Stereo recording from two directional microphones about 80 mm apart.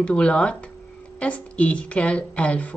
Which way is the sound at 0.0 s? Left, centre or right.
Centre.